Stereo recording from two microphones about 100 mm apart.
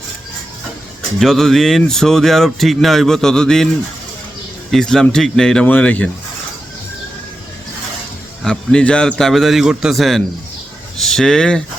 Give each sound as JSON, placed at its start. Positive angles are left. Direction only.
{"t": 1.2, "sound": "speech", "side_deg": 0}
{"t": 4.7, "sound": "speech", "side_deg": 5}
{"t": 8.4, "sound": "speech", "side_deg": 10}